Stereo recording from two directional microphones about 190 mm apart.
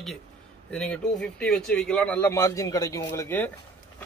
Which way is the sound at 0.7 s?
5° left (ahead or behind).